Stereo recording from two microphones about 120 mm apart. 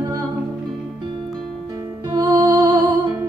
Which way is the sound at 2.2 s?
40° right (ahead or behind).